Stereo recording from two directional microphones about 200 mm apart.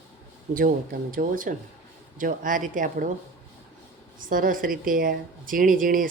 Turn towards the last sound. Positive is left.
turn(degrees=-45)  # may be behind; listen again after turning